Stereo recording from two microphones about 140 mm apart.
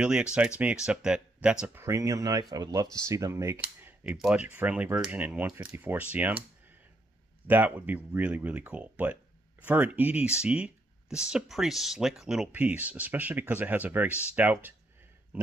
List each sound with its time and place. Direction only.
0.0 s speech: 5° right (ahead or behind)
1.8 s speech: 20° right (ahead or behind)
3.6 s cap gun: 10° right (ahead or behind)
4.5 s speech: 10° right (ahead or behind)
7.4 s speech: 10° right (ahead or behind)